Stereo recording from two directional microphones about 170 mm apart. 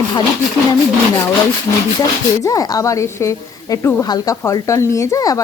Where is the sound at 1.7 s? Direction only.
25° left (ahead or behind).